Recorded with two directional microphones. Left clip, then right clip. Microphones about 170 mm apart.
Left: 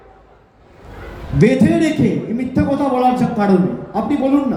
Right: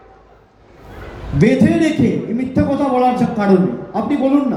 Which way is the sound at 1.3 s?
35° left (ahead or behind).